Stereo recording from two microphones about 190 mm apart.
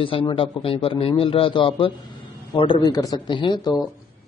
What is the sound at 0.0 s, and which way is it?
Speech, 30° left (ahead or behind).